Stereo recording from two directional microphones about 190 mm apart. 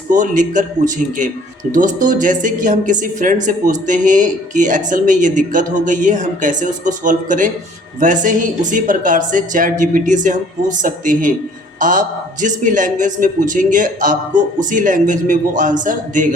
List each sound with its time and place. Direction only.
0.1 s a woman's voice: 40° right (ahead or behind)